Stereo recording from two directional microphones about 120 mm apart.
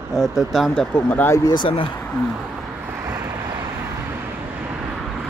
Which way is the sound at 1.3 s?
35° left (ahead or behind).